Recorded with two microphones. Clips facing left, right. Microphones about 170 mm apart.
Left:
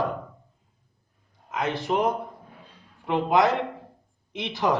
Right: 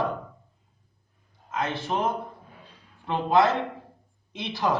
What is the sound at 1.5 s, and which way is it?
A man's voice, 20° left (ahead or behind).